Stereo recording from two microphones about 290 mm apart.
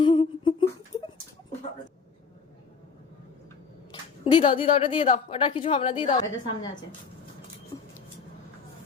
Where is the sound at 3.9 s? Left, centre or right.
Centre.